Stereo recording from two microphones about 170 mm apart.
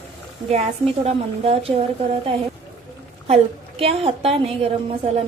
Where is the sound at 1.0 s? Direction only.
35° right (ahead or behind).